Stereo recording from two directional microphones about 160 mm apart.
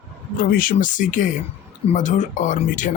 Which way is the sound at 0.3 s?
60° left (ahead or behind).